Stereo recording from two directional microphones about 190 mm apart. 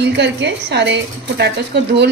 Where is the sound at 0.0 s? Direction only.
65° right (ahead or behind).